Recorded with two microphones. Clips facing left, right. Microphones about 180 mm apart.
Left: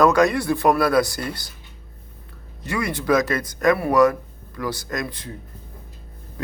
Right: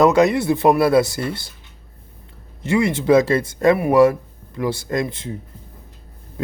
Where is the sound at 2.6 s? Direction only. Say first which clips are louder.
Right 6 dB; 25° right (ahead or behind).